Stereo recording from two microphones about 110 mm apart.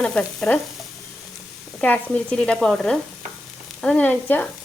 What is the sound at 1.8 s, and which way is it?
Sizzle, 10° left (ahead or behind).